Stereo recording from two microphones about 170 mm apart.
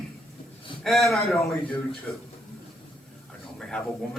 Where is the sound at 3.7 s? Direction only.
5° left (ahead or behind).